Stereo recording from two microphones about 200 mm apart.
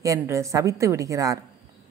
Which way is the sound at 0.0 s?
15° right (ahead or behind).